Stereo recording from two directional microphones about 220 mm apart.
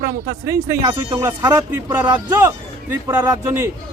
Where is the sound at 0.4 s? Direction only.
15° right (ahead or behind).